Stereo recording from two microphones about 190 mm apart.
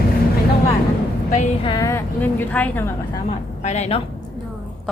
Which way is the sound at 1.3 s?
40° left (ahead or behind).